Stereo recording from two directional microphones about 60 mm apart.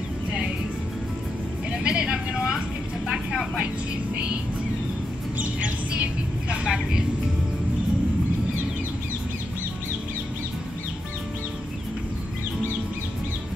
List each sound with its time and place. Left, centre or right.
1.8 s vehicle: centre
4.1 s music: right
5.4 s music: right
6.5 s vehicle: centre